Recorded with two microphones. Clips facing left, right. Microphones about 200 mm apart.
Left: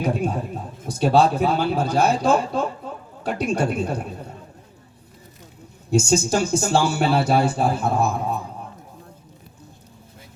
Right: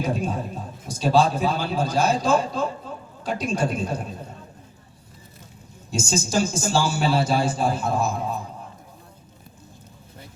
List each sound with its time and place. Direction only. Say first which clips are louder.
0.0 s speech: left 2 dB; 60° left (ahead or behind)
2.8 s a sound: left 2 dB; 65° left (ahead or behind)
3.2 s speech: left 2 dB; 60° left (ahead or behind)
5.9 s speech: left 5 dB; 60° left (ahead or behind)